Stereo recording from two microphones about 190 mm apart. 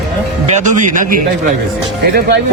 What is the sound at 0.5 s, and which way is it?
Speech, 40° right (ahead or behind).